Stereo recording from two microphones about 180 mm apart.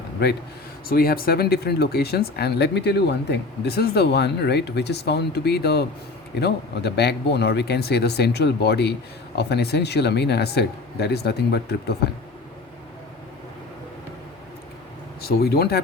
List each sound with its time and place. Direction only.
0.9 s speech: 55° left (ahead or behind)
15.2 s speech: 60° left (ahead or behind)